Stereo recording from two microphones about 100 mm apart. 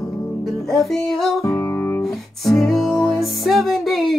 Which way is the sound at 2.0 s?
Centre (ahead or behind).